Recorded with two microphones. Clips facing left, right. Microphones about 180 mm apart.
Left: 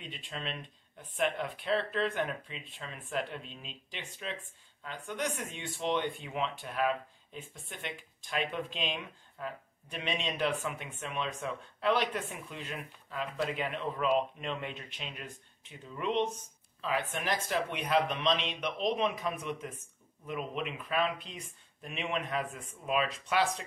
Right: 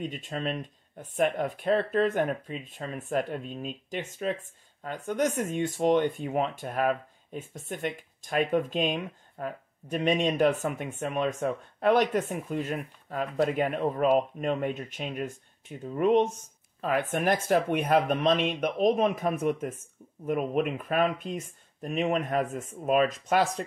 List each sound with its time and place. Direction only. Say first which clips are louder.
0.0 s speech: right 9 dB; 45° right (ahead or behind)